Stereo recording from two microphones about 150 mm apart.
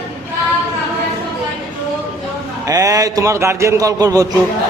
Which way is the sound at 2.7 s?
25° right (ahead or behind).